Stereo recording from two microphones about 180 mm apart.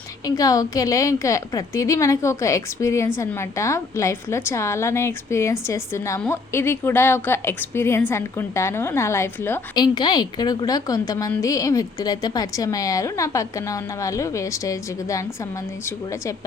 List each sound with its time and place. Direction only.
0.3 s a woman's voice: 20° left (ahead or behind)
9.7 s a woman's voice: 25° left (ahead or behind)